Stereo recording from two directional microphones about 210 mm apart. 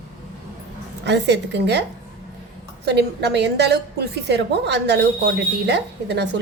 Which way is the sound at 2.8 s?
55° right (ahead or behind).